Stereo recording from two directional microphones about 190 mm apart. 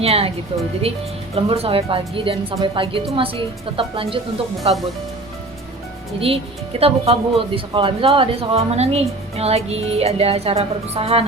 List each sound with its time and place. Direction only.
0.0 s speech: 30° right (ahead or behind)
1.4 s speech: 30° right (ahead or behind)
6.1 s speech: 30° right (ahead or behind)